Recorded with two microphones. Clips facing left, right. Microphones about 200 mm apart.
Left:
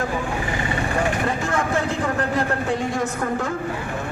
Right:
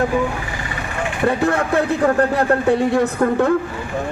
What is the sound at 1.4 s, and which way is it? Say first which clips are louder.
Speech: right 5 dB; 60° right (ahead or behind).